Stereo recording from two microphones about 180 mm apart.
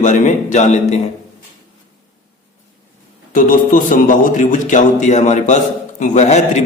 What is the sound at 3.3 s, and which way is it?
A man's voice, 45° left (ahead or behind).